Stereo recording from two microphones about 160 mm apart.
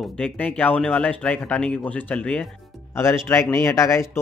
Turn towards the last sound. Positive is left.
turn(degrees=20)  # may be behind; listen again after turning